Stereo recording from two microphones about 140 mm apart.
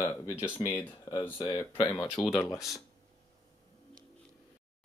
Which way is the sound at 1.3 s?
40° left (ahead or behind).